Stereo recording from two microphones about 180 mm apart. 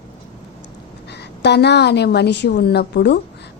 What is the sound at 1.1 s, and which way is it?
A woman's voice, 70° left (ahead or behind).